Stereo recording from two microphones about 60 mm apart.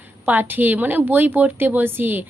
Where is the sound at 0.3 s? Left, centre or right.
Right.